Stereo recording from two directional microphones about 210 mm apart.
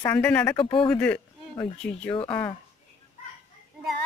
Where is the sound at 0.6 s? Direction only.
25° left (ahead or behind).